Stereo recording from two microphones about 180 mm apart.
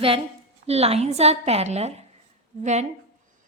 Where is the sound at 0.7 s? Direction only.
35° right (ahead or behind).